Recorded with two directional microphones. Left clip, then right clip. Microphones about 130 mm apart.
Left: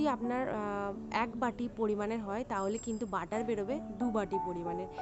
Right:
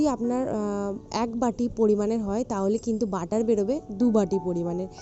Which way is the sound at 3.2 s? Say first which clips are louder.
Right 14 dB; 55° right (ahead or behind).